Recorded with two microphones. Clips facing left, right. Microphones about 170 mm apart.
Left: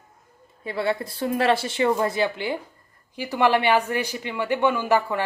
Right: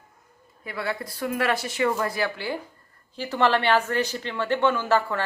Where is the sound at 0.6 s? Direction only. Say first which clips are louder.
Left 5 dB; 25° left (ahead or behind).